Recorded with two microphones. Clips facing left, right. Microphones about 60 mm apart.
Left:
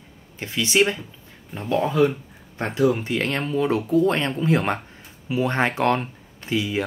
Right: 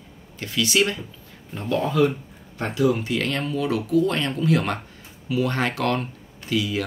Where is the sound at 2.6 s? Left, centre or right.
Left.